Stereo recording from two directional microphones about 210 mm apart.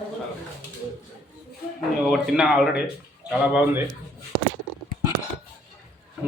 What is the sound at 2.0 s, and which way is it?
Speech, centre (ahead or behind).